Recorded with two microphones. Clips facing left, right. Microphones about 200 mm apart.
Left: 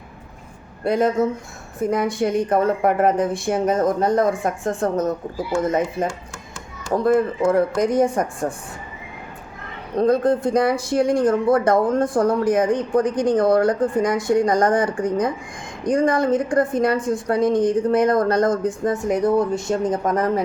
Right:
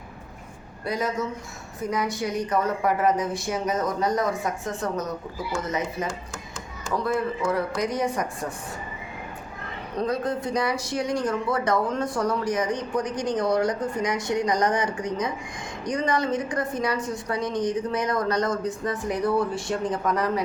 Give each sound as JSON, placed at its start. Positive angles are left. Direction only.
{"t": 0.9, "sound": "speech", "side_deg": 55}
{"t": 10.0, "sound": "speech", "side_deg": 50}